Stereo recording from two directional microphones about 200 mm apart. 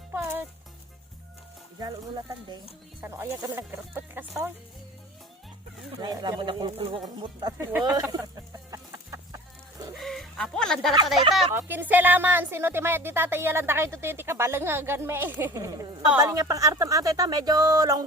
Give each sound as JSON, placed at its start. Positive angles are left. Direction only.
{"t": 0.1, "sound": "music", "side_deg": -10}
{"t": 1.8, "sound": "speech", "side_deg": -20}
{"t": 6.0, "sound": "speech", "side_deg": -20}
{"t": 8.1, "sound": "chicken", "side_deg": -20}
{"t": 9.9, "sound": "chicken", "side_deg": 0}
{"t": 11.5, "sound": "speech", "side_deg": -10}